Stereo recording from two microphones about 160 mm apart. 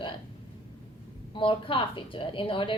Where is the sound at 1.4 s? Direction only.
35° left (ahead or behind).